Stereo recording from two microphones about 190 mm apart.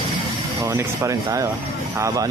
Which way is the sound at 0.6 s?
15° right (ahead or behind).